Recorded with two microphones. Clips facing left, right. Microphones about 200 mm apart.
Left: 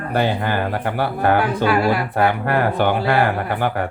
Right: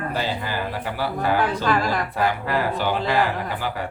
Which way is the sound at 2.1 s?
60° left (ahead or behind).